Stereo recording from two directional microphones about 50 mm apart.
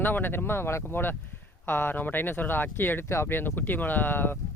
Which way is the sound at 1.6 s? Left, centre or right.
Left.